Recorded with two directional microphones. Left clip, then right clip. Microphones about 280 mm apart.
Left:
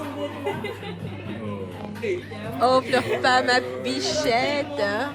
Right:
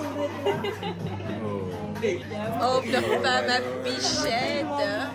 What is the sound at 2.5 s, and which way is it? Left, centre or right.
Speech, left.